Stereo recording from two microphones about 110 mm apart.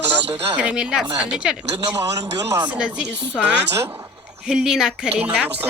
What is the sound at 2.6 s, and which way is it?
A woman's voice, 10° right (ahead or behind).